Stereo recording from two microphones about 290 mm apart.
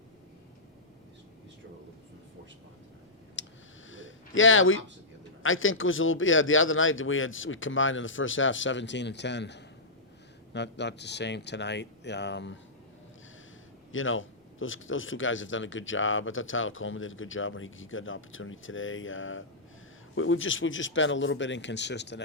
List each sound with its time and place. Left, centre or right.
3.4 s a sound: left
3.8 s gasp: left
5.4 s a man's voice: left
13.9 s a man's voice: left